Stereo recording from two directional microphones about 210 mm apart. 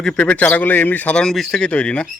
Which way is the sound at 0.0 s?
5° left (ahead or behind).